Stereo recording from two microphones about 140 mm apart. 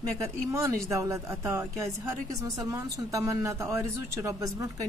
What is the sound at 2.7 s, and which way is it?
Speech, 25° right (ahead or behind).